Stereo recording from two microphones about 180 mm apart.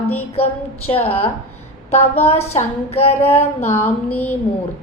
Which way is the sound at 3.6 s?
10° left (ahead or behind).